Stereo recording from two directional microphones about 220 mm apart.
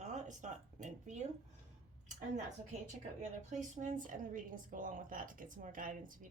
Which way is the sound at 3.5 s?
35° right (ahead or behind).